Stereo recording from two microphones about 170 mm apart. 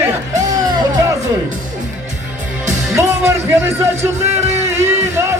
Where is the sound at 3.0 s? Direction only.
15° right (ahead or behind).